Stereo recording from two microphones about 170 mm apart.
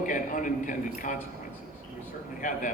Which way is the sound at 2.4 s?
50° left (ahead or behind).